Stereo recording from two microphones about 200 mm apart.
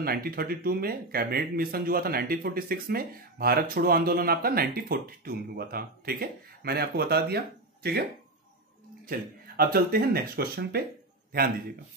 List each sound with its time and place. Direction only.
0.0 s speech: 50° right (ahead or behind)
9.6 s speech: 50° right (ahead or behind)